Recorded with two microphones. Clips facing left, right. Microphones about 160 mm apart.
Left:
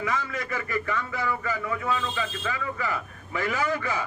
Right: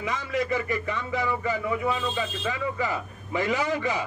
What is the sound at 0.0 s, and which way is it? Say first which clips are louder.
A man's voice: right 2 dB; 20° right (ahead or behind).